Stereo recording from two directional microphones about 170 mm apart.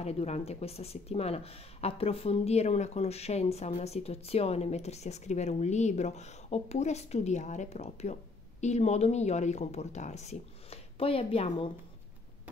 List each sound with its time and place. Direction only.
0.0 s speech: 40° left (ahead or behind)